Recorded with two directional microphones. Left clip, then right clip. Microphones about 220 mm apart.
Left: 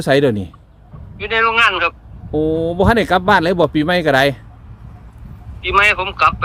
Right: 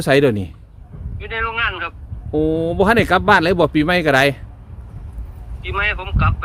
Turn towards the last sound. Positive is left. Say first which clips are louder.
# left 8 dB
turn(degrees=50)  # may be behind; listen again after turning